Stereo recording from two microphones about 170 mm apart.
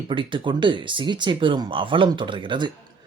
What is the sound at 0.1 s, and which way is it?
Speech, 30° right (ahead or behind).